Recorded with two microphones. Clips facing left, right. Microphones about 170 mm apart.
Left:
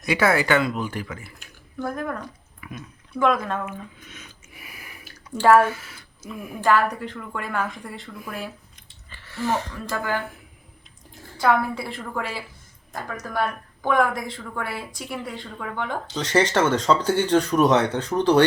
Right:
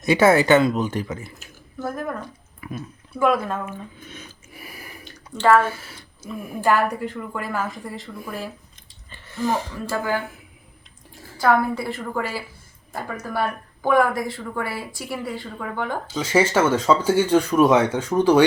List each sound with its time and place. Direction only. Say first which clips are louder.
0.0 s speech: right 5 dB; 25° right (ahead or behind)
1.4 s speech: even; 5° right (ahead or behind)
2.6 s a sound: right 6 dB; 35° right (ahead or behind)
3.2 s speech: right 1 dB; 5° right (ahead or behind)
3.7 s drip: right 2 dB; 30° right (ahead or behind)
5.0 s drip: left 1 dB; 10° left (ahead or behind)
5.6 s speech: even; 30° right (ahead or behind)
6.2 s a woman's voice: right 1 dB; 10° right (ahead or behind)
9.2 s speech: right 2 dB; 15° right (ahead or behind)
11.3 s a woman's voice: right 2 dB; centre (ahead or behind)